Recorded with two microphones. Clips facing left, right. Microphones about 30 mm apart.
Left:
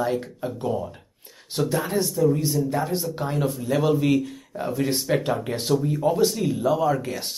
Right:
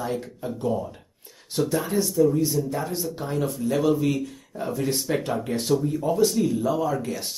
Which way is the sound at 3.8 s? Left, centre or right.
Centre.